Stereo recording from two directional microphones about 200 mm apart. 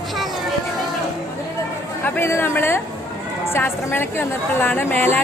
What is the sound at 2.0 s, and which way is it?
A woman's voice, 10° left (ahead or behind).